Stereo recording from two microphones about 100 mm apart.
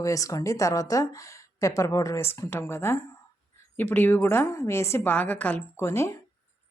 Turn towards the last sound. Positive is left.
turn(degrees=30)  # may be behind; listen again after turning